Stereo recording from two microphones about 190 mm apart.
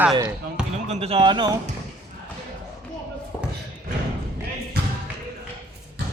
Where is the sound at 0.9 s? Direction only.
30° right (ahead or behind).